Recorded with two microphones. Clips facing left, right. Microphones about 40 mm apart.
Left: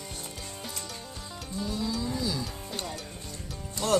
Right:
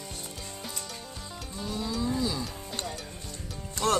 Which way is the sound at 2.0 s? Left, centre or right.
Right.